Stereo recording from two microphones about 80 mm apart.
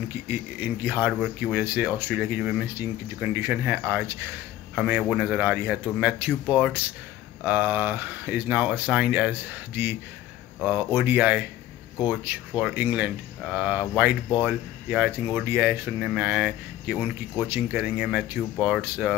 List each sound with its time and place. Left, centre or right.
0.1 s speech: right
4.7 s speech: centre
7.4 s speech: right